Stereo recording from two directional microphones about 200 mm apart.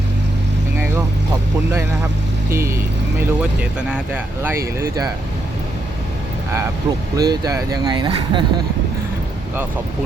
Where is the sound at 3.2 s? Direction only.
5° right (ahead or behind).